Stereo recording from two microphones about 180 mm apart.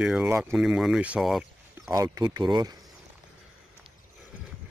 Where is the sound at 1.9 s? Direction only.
20° right (ahead or behind).